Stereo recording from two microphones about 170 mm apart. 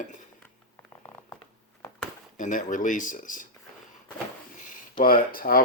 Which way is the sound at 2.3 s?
50° left (ahead or behind).